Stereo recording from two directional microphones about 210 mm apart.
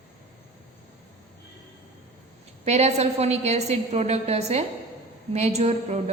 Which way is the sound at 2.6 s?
30° right (ahead or behind).